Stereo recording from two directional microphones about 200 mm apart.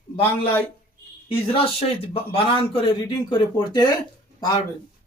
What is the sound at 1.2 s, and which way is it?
A man's voice, 30° left (ahead or behind).